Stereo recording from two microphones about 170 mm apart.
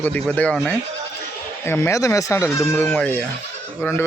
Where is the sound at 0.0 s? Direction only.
10° left (ahead or behind).